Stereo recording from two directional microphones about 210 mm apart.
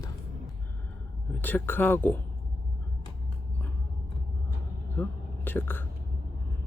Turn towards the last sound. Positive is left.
turn(degrees=10)  # may be behind; listen again after turning